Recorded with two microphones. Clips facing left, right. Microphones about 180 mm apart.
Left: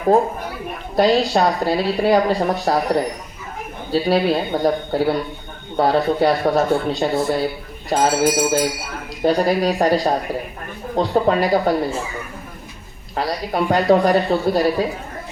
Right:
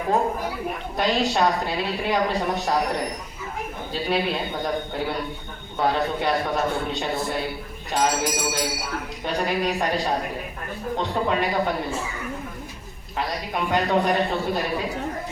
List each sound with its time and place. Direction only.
0.9 s speech: 35° left (ahead or behind)
13.1 s speech: 35° left (ahead or behind)